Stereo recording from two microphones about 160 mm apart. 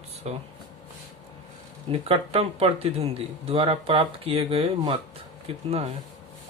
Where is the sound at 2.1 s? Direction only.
35° right (ahead or behind).